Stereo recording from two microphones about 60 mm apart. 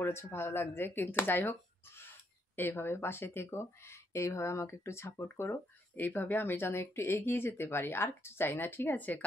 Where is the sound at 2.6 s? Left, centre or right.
Left.